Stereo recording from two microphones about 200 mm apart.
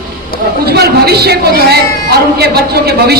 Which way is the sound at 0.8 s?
50° right (ahead or behind).